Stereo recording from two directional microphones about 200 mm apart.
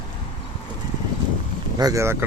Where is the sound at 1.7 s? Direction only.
15° right (ahead or behind).